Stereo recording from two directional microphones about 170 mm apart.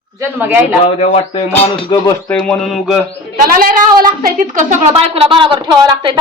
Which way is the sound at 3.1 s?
55° right (ahead or behind).